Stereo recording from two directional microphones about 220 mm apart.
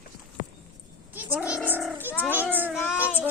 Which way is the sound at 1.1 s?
5° right (ahead or behind).